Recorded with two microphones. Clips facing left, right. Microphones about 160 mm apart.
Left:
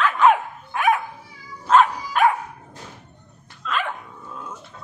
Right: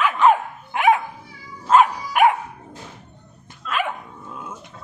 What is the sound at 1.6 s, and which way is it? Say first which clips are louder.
Dog: right 1 dB; 10° right (ahead or behind).